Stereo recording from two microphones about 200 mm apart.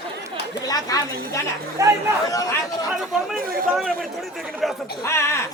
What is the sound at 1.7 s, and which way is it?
Speech, 15° right (ahead or behind).